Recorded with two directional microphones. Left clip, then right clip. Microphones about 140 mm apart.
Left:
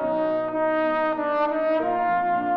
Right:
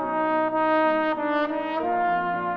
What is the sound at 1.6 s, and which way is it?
French horn, 40° right (ahead or behind).